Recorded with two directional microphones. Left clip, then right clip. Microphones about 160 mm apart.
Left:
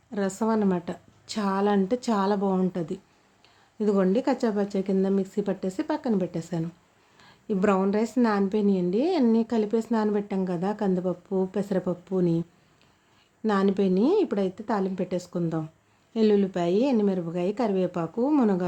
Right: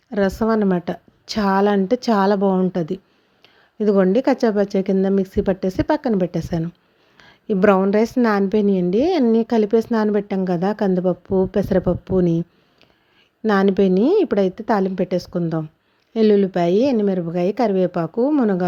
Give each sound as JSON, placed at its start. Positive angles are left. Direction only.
{"t": 0.1, "sound": "a woman's voice", "side_deg": -35}
{"t": 13.5, "sound": "a woman's voice", "side_deg": -40}